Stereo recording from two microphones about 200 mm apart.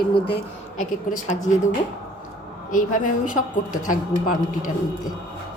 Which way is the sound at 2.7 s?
40° left (ahead or behind).